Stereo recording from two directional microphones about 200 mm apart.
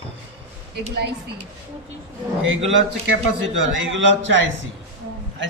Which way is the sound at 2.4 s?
70° right (ahead or behind).